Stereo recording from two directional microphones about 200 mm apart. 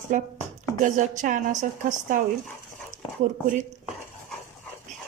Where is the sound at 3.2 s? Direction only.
40° right (ahead or behind).